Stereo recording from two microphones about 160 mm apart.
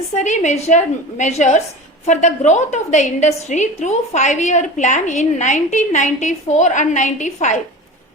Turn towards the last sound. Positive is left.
turn(degrees=50)  # may be behind; listen again after turning